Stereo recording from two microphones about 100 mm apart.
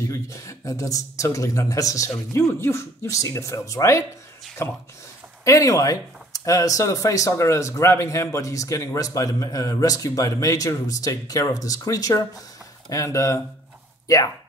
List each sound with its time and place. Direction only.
0.0 s speech: 30° left (ahead or behind)